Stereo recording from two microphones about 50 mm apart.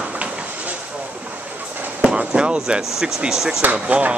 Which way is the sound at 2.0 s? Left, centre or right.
Centre.